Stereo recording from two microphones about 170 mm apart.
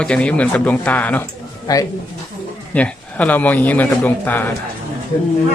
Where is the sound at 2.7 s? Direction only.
10° left (ahead or behind).